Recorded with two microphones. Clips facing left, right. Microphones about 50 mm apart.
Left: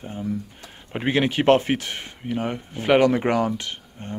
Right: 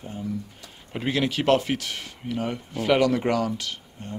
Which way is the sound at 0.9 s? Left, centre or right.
Left.